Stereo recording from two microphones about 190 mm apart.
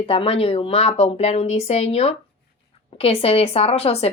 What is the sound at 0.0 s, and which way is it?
Speech, 30° left (ahead or behind).